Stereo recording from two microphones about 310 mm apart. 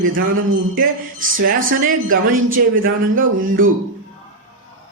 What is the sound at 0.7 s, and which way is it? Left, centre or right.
Speech, right.